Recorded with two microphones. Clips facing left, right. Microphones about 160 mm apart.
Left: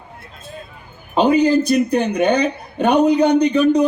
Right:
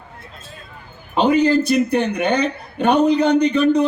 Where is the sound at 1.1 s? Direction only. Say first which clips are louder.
Left 1 dB; 15° left (ahead or behind).